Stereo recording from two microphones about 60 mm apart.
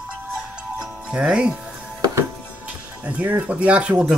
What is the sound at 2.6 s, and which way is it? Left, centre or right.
Speech, right.